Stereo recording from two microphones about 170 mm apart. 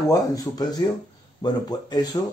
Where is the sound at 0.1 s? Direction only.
20° left (ahead or behind).